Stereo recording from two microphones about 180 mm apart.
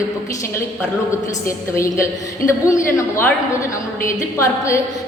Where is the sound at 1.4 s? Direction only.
15° left (ahead or behind).